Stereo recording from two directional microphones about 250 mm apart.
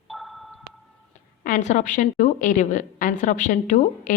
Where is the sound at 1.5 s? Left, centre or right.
Left.